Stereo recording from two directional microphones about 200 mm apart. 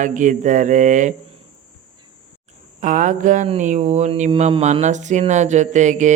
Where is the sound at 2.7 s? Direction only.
40° right (ahead or behind).